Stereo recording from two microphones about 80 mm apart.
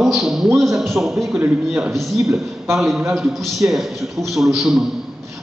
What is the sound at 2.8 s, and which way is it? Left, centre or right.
Speech, centre.